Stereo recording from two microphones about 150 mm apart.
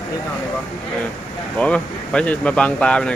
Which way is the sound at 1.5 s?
10° left (ahead or behind).